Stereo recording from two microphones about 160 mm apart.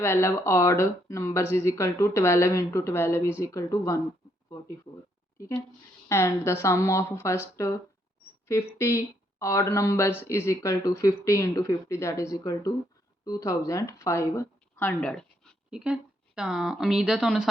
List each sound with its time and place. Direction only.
0.0 s speech: 15° left (ahead or behind)
6.1 s speech: 15° left (ahead or behind); by 17.5 s centre (ahead or behind)